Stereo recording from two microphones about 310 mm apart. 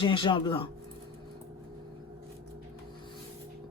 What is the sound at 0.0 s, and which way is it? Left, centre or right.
Speech, centre.